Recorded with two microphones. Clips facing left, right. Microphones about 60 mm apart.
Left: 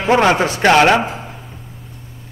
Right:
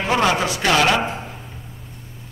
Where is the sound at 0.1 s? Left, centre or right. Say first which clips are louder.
Left 6 dB; left.